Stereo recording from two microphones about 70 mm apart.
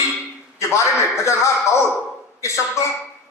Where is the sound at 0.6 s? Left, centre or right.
Left.